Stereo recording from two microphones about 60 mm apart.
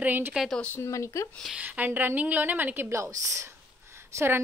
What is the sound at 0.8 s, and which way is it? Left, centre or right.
Speech, left.